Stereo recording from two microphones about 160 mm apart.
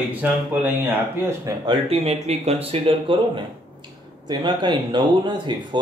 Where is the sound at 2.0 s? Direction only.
40° right (ahead or behind).